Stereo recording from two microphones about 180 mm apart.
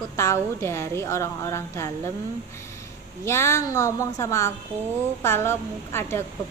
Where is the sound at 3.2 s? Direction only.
15° left (ahead or behind).